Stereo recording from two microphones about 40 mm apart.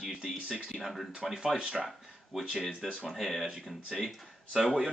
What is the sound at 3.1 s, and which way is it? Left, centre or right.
Speech, centre.